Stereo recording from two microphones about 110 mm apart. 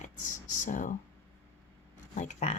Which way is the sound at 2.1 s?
90° left.